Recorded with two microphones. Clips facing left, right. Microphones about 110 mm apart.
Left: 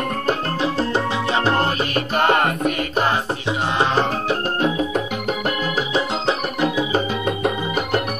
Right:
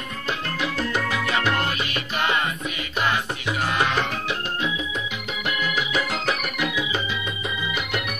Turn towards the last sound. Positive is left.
turn(degrees=35)  # may be behind; listen again after turning